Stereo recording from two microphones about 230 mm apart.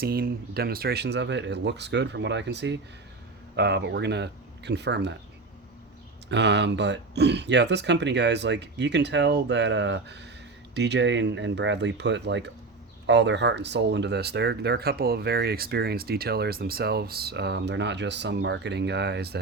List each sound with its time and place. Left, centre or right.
0.0 s speech: right
6.3 s speech: right